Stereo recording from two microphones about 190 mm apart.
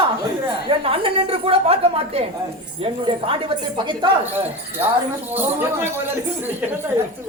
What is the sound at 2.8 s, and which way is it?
Speech, 30° right (ahead or behind).